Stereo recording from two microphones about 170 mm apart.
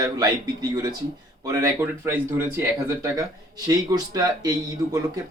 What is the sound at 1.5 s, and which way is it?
Speech, 20° right (ahead or behind).